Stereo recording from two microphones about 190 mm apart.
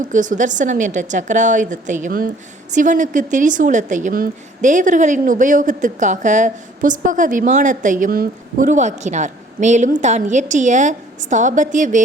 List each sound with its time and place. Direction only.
0.0 s a woman's voice: 40° right (ahead or behind)